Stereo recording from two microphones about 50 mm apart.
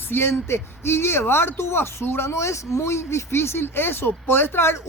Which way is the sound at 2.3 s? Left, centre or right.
Left.